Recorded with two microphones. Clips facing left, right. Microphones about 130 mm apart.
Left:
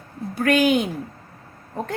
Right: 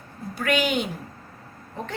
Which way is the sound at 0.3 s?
40° left (ahead or behind).